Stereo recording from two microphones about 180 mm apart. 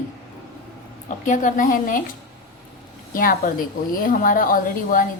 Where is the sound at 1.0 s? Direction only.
45° left (ahead or behind).